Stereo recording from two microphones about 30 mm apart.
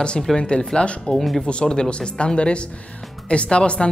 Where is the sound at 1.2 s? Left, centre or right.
Centre.